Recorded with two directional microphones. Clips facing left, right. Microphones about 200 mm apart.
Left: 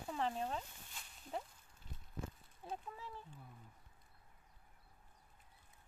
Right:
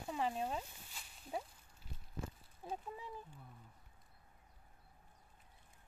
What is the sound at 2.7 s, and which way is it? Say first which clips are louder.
Speech: right 2 dB; 15° right (ahead or behind).